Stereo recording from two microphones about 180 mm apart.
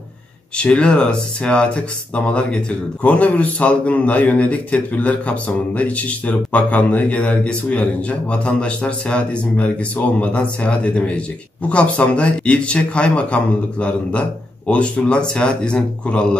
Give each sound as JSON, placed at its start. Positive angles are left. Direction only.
{"t": 0.6, "sound": "a man's voice", "side_deg": 5}